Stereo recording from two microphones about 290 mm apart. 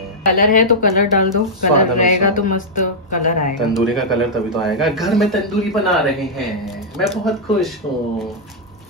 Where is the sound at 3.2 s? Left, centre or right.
Left.